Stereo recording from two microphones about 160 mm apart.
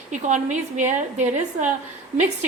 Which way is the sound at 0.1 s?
50° right (ahead or behind).